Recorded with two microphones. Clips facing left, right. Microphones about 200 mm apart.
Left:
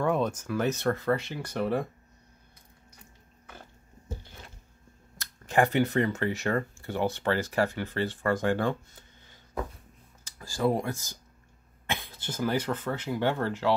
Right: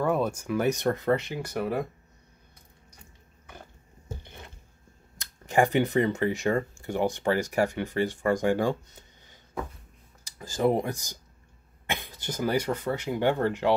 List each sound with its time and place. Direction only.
0.0 s speech: 5° right (ahead or behind)
5.1 s speech: 15° right (ahead or behind)
10.2 s speech: 20° right (ahead or behind)